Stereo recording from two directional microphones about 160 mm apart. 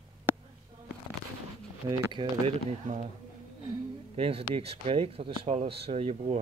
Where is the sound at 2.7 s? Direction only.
50° right (ahead or behind).